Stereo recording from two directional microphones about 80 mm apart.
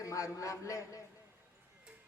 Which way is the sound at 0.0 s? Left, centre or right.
Left.